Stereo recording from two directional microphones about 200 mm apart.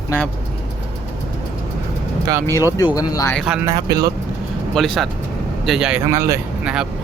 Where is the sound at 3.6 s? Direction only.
20° right (ahead or behind).